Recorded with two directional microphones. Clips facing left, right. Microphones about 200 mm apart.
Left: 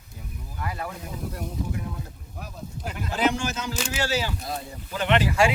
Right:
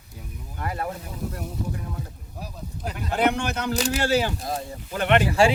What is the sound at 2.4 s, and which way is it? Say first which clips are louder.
Sheep: right 1 dB; 35° right (ahead or behind).